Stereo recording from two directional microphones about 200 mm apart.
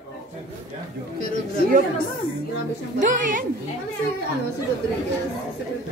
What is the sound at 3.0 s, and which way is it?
Speech, 40° right (ahead or behind).